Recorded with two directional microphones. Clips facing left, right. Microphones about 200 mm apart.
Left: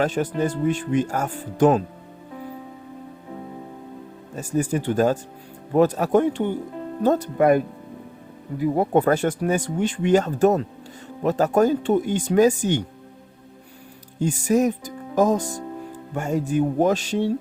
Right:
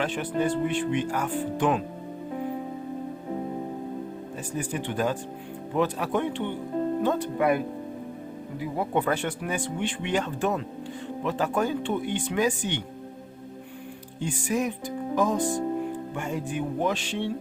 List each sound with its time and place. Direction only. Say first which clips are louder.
0.0 s speech: left 4 dB; 40° left (ahead or behind)
4.4 s speech: left 9 dB; 45° left (ahead or behind)
14.2 s music: left 8 dB; 40° left (ahead or behind)
16.1 s speech: left 12 dB; 40° left (ahead or behind)